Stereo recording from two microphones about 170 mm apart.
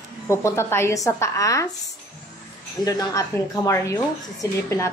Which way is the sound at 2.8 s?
20° left (ahead or behind).